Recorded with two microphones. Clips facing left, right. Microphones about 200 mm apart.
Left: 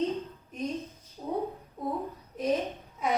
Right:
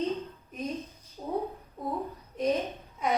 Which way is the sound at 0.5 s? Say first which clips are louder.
Left 2 dB; centre (ahead or behind).